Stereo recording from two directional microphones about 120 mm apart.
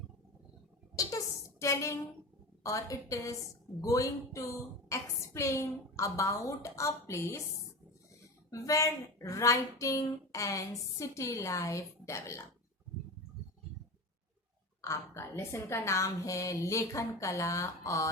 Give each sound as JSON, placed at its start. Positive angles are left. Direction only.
{"t": 0.9, "sound": "a sound", "side_deg": 25}
{"t": 2.6, "sound": "a woman's voice", "side_deg": 25}
{"t": 8.4, "sound": "a woman's voice", "side_deg": 25}
{"t": 14.8, "sound": "a woman's voice", "side_deg": 25}